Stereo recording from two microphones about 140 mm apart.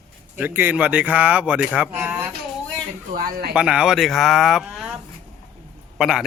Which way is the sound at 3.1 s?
90° right.